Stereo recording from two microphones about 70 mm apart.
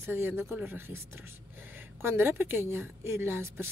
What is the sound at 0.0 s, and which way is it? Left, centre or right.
Speech, right.